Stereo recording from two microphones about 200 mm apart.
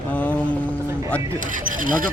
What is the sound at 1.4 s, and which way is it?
Rub, 40° right (ahead or behind).